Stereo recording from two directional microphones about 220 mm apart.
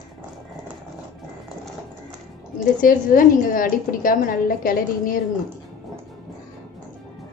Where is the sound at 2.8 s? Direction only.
40° left (ahead or behind).